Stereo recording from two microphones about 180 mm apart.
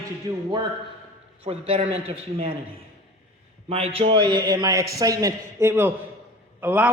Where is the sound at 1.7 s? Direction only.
30° right (ahead or behind).